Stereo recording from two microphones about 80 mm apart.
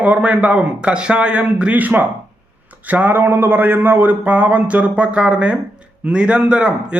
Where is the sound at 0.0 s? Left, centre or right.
Centre.